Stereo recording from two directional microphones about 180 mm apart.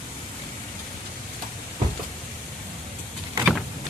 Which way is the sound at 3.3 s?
Centre (ahead or behind).